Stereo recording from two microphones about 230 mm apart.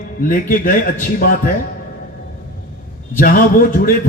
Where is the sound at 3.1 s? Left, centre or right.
Left.